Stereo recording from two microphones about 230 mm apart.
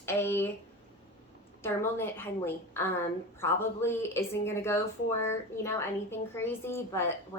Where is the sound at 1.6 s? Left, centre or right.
Centre.